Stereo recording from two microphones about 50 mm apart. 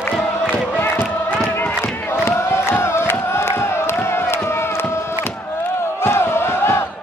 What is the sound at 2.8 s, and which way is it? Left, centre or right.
Music, left.